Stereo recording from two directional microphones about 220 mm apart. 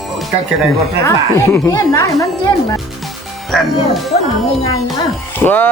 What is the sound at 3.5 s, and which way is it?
Speech, centre (ahead or behind).